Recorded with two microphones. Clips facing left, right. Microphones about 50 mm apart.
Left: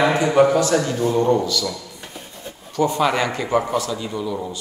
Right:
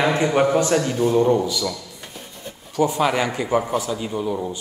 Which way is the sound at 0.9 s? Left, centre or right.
Centre.